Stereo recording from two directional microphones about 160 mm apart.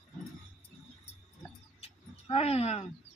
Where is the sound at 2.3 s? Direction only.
40° left (ahead or behind).